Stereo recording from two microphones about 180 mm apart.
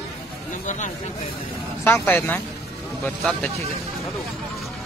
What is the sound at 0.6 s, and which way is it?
Speech, 45° left (ahead or behind).